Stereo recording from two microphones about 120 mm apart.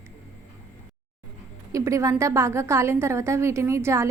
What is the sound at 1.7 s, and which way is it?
A woman's voice, 25° right (ahead or behind).